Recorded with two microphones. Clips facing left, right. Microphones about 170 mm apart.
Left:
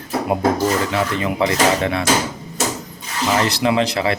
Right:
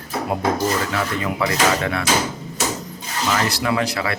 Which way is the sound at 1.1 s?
25° left (ahead or behind).